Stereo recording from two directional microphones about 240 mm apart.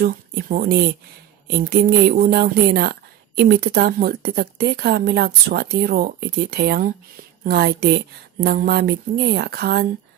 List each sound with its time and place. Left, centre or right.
0.0 s a woman's voice: right